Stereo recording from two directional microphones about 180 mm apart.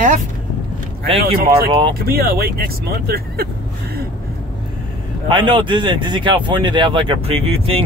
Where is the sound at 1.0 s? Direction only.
30° right (ahead or behind).